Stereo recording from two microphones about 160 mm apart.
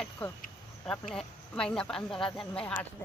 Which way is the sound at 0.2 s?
10° left (ahead or behind).